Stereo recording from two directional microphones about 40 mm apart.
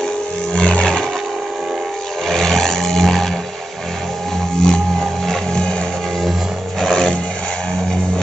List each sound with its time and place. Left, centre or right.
2.2 s roar: centre
4.6 s vehicle: left
5.0 s music: centre
5.5 s music: centre
6.8 s a sound: centre